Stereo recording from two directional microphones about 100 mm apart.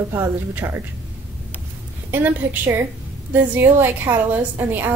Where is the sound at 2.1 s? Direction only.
20° right (ahead or behind).